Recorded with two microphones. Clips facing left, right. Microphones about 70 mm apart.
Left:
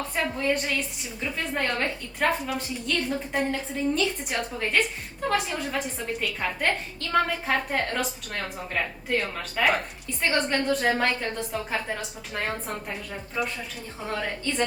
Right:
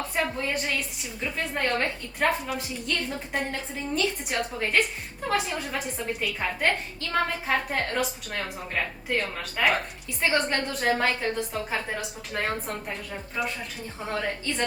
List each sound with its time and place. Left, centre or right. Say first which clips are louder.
0.4 s a woman's voice: left 3 dB; centre